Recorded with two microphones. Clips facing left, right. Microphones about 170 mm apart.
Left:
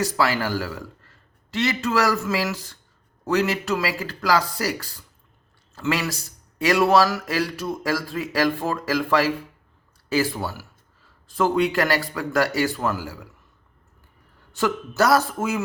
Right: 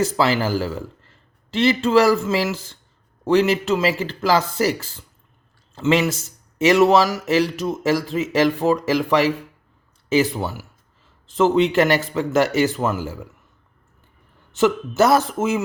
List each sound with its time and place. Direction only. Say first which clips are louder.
0.0 s speech: right 4 dB; 25° right (ahead or behind)
14.5 s speech: right 6 dB; 20° right (ahead or behind)